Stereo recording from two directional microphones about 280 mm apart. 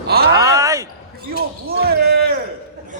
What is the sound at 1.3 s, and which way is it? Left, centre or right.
Speech, right.